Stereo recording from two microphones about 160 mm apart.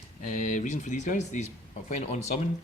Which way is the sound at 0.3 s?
55° left (ahead or behind).